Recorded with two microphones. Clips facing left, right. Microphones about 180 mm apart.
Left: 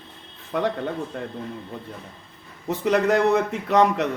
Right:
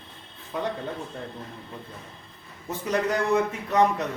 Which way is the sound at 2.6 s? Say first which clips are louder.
Left 6 dB; 75° left (ahead or behind).